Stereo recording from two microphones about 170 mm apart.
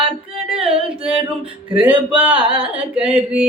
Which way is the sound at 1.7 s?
30° right (ahead or behind).